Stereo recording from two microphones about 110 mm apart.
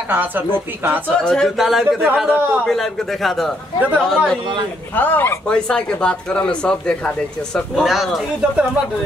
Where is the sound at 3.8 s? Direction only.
15° right (ahead or behind).